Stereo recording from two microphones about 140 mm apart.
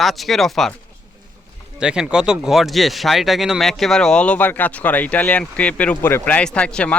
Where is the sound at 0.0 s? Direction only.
Centre (ahead or behind).